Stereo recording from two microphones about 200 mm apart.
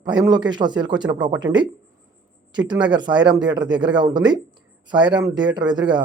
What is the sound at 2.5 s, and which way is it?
A man's voice, 20° right (ahead or behind).